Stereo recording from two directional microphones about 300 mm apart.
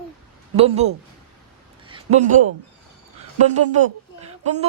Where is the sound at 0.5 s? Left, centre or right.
Right.